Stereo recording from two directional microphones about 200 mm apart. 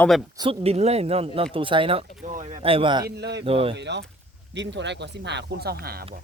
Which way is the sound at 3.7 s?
60° right (ahead or behind).